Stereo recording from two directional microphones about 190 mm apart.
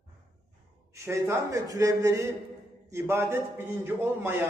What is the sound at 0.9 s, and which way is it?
A man's voice, 15° right (ahead or behind).